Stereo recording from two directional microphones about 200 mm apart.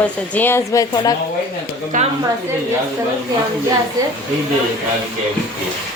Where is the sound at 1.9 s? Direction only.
40° right (ahead or behind).